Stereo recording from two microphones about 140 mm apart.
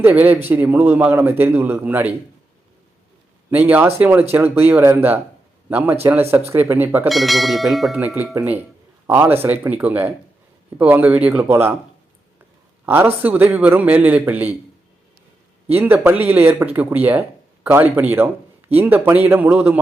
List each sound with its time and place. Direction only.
0.0 s speech: 15° right (ahead or behind)
3.5 s speech: 10° right (ahead or behind)
7.1 s speech: centre (ahead or behind)
7.9 s speech: 10° right (ahead or behind)
12.8 s speech: 15° right (ahead or behind)
15.7 s speech: 15° right (ahead or behind)